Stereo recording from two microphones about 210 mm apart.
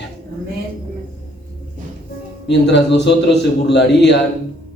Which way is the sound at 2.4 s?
55° left (ahead or behind).